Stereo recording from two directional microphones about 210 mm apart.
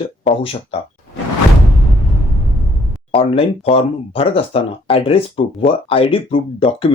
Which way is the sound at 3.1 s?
25° left (ahead or behind).